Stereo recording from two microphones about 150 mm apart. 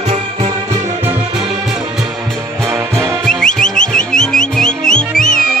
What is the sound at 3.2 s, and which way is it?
Music, 5° left (ahead or behind).